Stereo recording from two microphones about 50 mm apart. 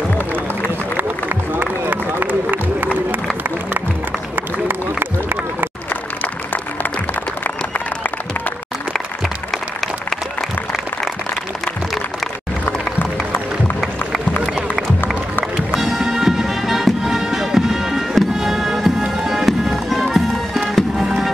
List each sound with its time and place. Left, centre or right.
1.6 s run: right
2.5 s music: right
12.6 s music: left
15.7 s music: centre